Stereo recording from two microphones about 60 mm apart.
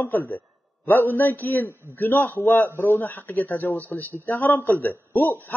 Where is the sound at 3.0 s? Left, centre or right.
Left.